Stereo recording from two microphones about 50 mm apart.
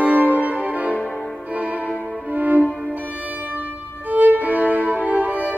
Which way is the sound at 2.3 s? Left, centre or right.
Right.